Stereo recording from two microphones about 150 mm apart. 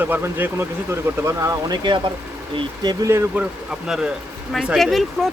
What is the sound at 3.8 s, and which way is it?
Speech, 5° right (ahead or behind).